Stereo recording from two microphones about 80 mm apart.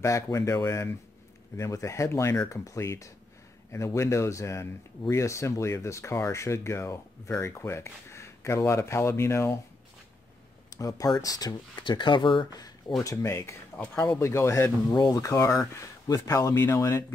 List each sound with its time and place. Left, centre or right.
0.0 s speech: left
10.7 s speech: left
12.5 s a sound: left
13.0 s speech: left
15.1 s speech: left